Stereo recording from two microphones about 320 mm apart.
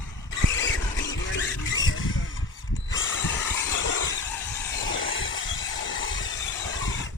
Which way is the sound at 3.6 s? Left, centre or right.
Left.